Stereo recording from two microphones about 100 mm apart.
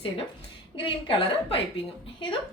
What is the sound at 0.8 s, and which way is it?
Speech, 60° left (ahead or behind).